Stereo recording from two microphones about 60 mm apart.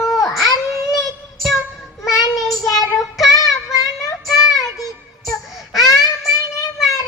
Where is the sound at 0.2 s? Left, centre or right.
Left.